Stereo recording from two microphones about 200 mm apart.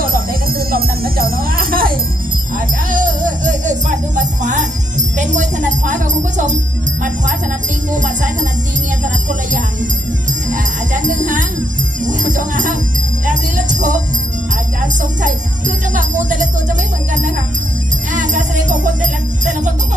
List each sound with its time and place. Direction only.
0.7 s music: 50° right (ahead or behind)
7.9 s music: 40° right (ahead or behind)
10.5 s jingle bell: 40° right (ahead or behind)
12.2 s music: 40° right (ahead or behind)
15.2 s music: 40° right (ahead or behind)
18.1 s music: 40° right (ahead or behind)